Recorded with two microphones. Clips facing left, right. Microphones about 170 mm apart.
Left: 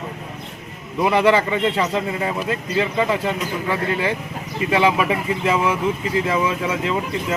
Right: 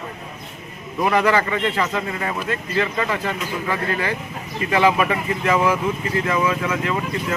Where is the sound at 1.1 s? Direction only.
25° left (ahead or behind).